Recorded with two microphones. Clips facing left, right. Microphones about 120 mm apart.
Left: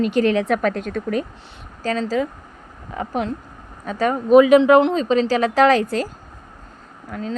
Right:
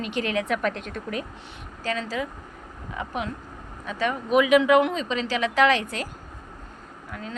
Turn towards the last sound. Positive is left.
turn(degrees=40)  # may be behind; listen again after turning